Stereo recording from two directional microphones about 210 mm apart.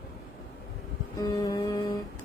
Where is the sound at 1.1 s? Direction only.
15° left (ahead or behind).